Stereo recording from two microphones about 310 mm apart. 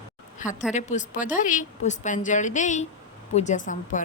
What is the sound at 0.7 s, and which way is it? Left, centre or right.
Speech, left.